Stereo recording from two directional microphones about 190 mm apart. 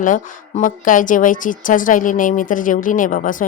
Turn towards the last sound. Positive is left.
turn(degrees=45)  # may be behind; listen again after turning